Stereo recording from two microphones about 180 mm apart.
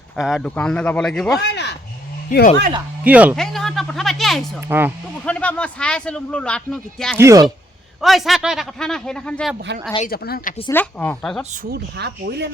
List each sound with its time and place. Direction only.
0.2 s speech: centre (ahead or behind)
1.4 s a sound: 75° left (ahead or behind)
2.3 s speech: 45° left (ahead or behind)
3.0 s speech: 10° right (ahead or behind)
3.3 s speech: centre (ahead or behind)
7.2 s speech: 15° right (ahead or behind)
8.0 s speech: centre (ahead or behind)
9.7 s speech: 75° right (ahead or behind)
10.1 s speech: 55° left (ahead or behind)
10.7 s speech: 10° left (ahead or behind)
11.5 s speech: 55° right (ahead or behind)